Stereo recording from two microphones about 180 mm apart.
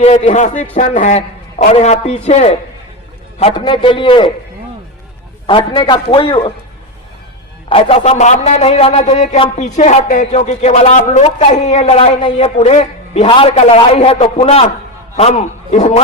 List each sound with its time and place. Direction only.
0.0 s speech: 35° left (ahead or behind)
3.4 s a man's voice: 25° left (ahead or behind)
5.5 s a man's voice: 25° left (ahead or behind)
7.7 s a man's voice: 30° left (ahead or behind)